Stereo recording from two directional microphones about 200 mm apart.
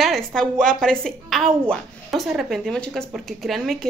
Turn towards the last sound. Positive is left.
turn(degrees=0)  # may be behind; listen again after turning